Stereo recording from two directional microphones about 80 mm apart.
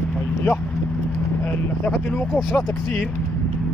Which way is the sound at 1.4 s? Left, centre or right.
Left.